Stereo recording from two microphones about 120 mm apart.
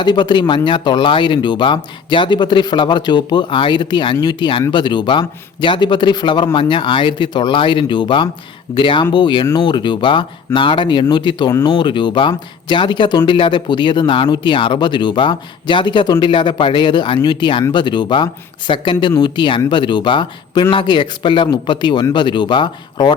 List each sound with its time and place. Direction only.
0.0 s speech: 40° left (ahead or behind)